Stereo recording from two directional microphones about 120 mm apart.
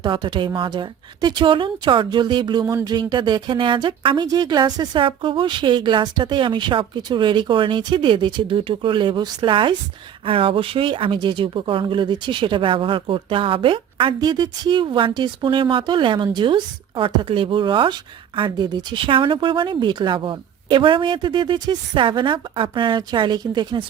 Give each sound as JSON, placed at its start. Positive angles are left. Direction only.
{"t": 0.0, "sound": "speech", "side_deg": -40}